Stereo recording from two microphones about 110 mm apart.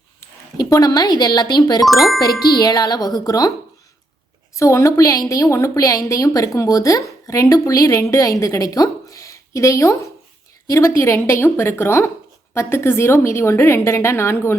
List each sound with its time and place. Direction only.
0.2 s speech: 35° left (ahead or behind)
1.9 s speech: centre (ahead or behind)
2.2 s speech: 35° left (ahead or behind)
4.5 s speech: 25° left (ahead or behind)